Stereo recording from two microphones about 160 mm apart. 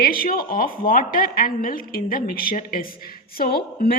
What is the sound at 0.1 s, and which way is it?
Speech, 65° left (ahead or behind).